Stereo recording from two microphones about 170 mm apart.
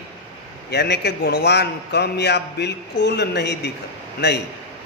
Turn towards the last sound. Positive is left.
turn(degrees=75)  # may be behind; listen again after turning